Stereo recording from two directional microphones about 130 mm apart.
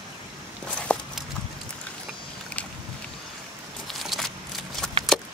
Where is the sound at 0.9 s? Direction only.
10° left (ahead or behind).